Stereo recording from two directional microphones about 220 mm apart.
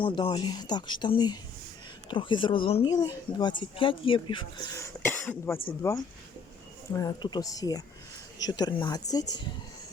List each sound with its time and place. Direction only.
0.0 s speech: 20° left (ahead or behind)